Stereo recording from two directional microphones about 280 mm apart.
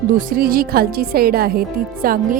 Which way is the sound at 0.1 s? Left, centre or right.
Right.